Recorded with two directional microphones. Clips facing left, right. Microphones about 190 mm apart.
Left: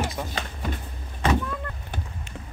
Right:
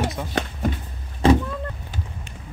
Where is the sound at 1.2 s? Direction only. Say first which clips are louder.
Right 7 dB; 30° right (ahead or behind).